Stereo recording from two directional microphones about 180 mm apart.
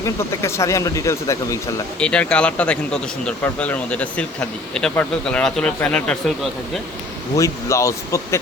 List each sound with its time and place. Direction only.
0.0 s speech: 15° left (ahead or behind)
2.0 s speech: 5° left (ahead or behind)
7.3 s speech: 15° left (ahead or behind)